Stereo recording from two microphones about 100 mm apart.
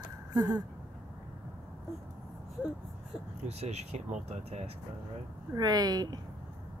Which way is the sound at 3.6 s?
90° right.